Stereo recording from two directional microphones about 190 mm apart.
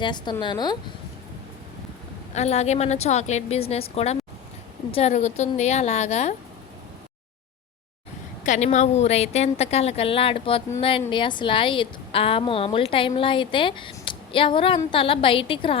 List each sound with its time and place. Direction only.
0.0 s a woman's voice: 25° left (ahead or behind)
2.3 s a woman's voice: 35° left (ahead or behind)
8.4 s a woman's voice: 40° left (ahead or behind)